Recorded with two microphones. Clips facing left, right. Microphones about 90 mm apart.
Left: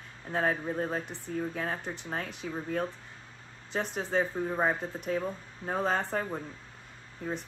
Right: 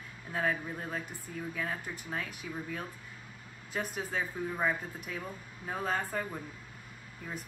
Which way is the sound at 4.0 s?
30° left (ahead or behind).